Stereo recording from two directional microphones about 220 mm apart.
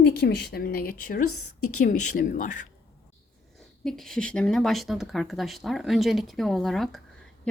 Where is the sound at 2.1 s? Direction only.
35° left (ahead or behind).